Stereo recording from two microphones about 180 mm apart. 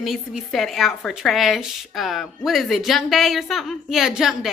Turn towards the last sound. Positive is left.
turn(degrees=0)  # may be behind; listen again after turning